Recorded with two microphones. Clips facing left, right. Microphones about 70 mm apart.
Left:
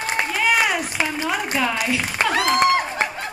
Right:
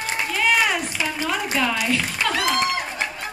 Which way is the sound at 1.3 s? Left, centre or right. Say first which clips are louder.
Left 1 dB; centre.